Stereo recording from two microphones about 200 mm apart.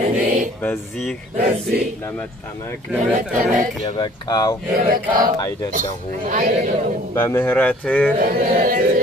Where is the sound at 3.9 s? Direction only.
20° left (ahead or behind).